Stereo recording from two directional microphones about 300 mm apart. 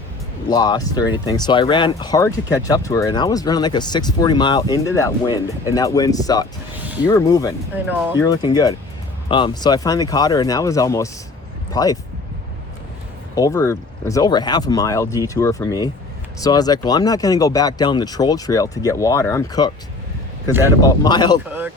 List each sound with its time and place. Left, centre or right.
0.5 s speech: centre
13.3 s speech: centre